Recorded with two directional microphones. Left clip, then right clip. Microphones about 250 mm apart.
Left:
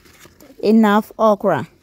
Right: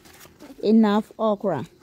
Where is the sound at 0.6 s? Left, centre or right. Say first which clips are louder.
Left 6 dB; centre.